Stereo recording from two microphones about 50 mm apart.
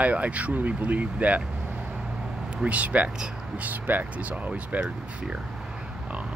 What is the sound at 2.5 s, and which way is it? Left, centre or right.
Speech, right.